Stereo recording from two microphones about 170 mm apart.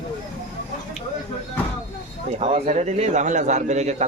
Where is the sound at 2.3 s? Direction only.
40° right (ahead or behind).